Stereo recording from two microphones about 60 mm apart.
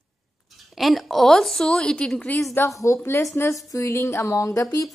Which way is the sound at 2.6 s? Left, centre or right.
Left.